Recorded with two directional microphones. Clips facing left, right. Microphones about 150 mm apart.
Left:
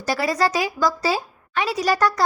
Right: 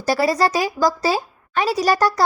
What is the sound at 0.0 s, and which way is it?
A woman's voice, 35° right (ahead or behind).